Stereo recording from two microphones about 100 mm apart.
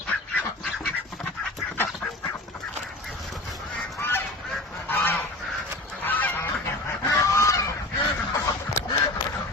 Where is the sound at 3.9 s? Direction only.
25° left (ahead or behind).